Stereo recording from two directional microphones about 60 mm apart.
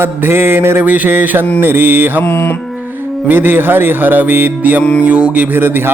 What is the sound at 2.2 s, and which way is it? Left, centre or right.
Speech, left.